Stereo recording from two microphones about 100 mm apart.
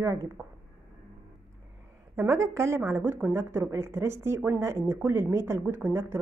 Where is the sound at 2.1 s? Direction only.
25° right (ahead or behind).